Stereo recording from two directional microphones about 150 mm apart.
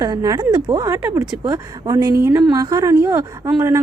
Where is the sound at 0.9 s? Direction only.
15° right (ahead or behind).